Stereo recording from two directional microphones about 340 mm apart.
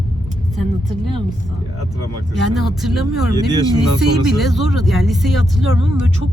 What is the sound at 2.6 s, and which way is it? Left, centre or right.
Speech, centre.